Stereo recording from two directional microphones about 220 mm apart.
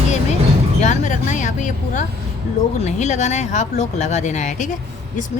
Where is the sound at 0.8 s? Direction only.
35° left (ahead or behind).